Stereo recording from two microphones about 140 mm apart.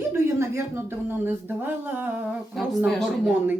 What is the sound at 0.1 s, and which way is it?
Speech, 20° right (ahead or behind).